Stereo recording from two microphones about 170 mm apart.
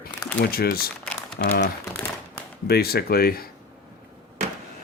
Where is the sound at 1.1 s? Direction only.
5° left (ahead or behind).